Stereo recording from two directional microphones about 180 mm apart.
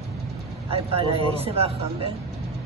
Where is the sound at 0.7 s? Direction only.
30° right (ahead or behind).